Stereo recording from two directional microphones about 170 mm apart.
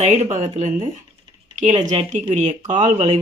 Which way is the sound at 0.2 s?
45° right (ahead or behind).